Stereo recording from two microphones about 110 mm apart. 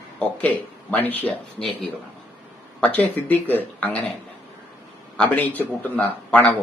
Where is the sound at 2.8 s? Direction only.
15° left (ahead or behind).